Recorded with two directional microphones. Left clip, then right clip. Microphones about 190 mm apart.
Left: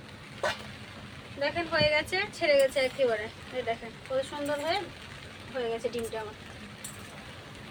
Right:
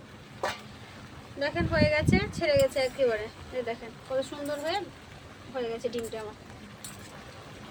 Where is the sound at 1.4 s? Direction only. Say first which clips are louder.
Even; 20° right (ahead or behind).